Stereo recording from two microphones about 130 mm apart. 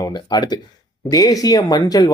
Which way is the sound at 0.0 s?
35° left (ahead or behind).